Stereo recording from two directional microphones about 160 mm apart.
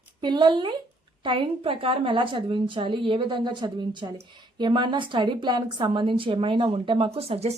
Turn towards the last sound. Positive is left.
turn(degrees=-40)  # may be behind; listen again after turning